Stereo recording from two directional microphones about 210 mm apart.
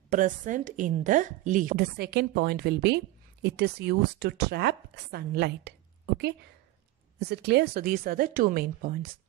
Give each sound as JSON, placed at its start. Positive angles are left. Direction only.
{"t": 0.1, "sound": "a woman's voice", "side_deg": -40}